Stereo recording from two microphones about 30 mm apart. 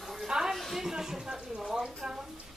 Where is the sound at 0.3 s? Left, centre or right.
Right.